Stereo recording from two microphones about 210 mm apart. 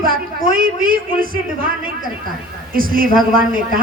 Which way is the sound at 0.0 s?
45° right (ahead or behind).